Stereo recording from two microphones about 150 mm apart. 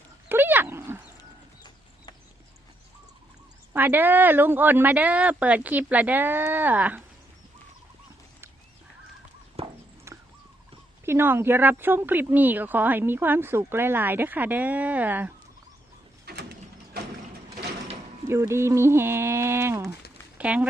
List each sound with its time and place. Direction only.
0.3 s wild animals: 15° right (ahead or behind)
3.7 s speech: 15° right (ahead or behind)
9.6 s horse: 40° right (ahead or behind)
10.1 s a sound: 20° right (ahead or behind)
11.0 s speech: 15° right (ahead or behind)
16.2 s a sound: 90° right
18.3 s speech: 20° right (ahead or behind)